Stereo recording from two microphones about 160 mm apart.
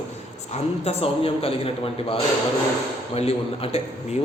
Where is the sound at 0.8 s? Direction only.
40° left (ahead or behind).